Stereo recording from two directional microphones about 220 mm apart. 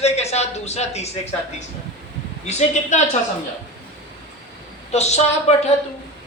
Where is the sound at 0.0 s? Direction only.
30° left (ahead or behind).